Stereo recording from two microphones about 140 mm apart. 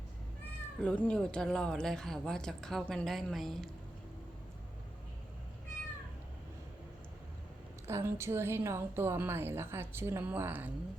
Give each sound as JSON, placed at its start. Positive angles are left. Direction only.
{"t": 0.8, "sound": "a woman's voice", "side_deg": 10}
{"t": 7.9, "sound": "a woman's voice", "side_deg": -20}